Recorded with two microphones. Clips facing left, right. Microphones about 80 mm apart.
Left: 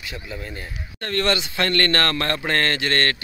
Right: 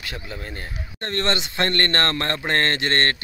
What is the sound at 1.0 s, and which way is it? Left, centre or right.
A man's voice, right.